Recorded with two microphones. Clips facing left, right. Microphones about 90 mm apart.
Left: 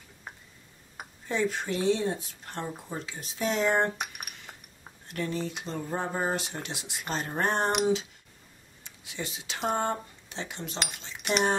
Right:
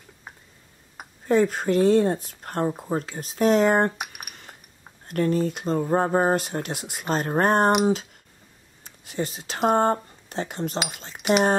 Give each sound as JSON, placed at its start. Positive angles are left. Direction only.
{"t": 1.2, "sound": "speech", "side_deg": -45}
{"t": 4.0, "sound": "a sound", "side_deg": -5}
{"t": 4.5, "sound": "scissors", "side_deg": -5}
{"t": 5.0, "sound": "speech", "side_deg": -50}